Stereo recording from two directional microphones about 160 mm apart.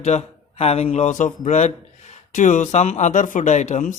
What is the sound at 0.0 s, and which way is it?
Speech, 40° left (ahead or behind).